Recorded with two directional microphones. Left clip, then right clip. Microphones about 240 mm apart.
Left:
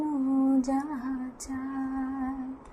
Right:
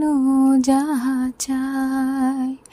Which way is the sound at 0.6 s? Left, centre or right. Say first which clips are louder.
Right 11 dB; right.